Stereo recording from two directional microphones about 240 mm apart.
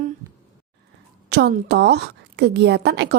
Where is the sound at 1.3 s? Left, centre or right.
Right.